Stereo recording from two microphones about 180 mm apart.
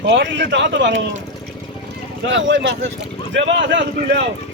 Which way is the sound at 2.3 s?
90° right.